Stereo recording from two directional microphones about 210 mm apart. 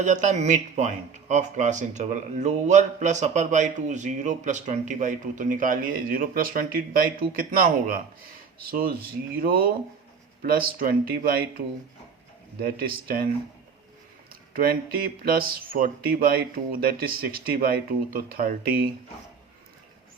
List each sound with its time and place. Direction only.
0.0 s speech: 35° right (ahead or behind)
14.5 s speech: 45° right (ahead or behind)